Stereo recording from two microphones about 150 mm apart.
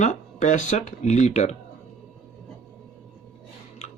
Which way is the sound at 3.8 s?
50° left (ahead or behind).